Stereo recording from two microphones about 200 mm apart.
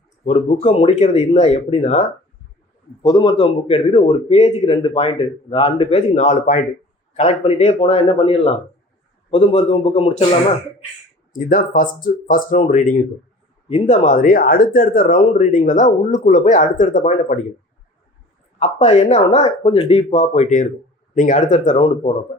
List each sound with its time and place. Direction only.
0.3 s speech: 35° left (ahead or behind)
3.0 s speech: 20° left (ahead or behind)
11.3 s speech: 40° left (ahead or behind)
18.6 s speech: 35° left (ahead or behind)